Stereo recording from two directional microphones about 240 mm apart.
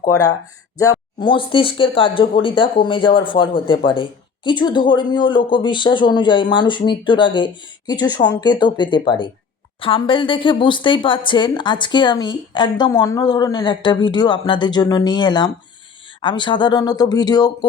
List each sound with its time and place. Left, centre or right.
0.0 s speech: centre